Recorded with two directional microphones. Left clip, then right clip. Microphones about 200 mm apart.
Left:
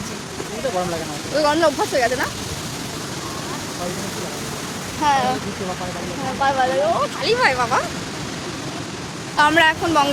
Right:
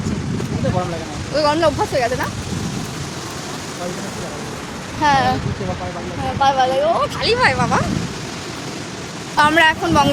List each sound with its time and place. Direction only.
1.4 s speech: 5° right (ahead or behind)
5.0 s speech: 20° right (ahead or behind)
6.4 s speech: 20° right (ahead or behind)
9.4 s speech: 15° right (ahead or behind)